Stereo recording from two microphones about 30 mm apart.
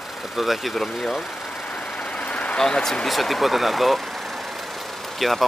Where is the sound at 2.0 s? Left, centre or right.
Left.